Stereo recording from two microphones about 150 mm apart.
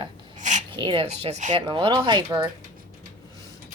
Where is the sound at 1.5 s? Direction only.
35° right (ahead or behind).